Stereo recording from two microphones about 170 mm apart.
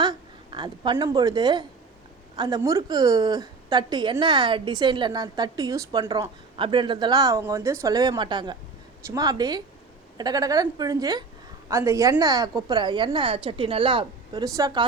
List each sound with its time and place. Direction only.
0.0 s a woman's voice: 25° right (ahead or behind)